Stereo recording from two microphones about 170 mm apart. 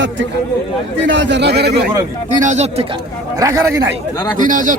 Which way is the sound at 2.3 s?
45° right (ahead or behind).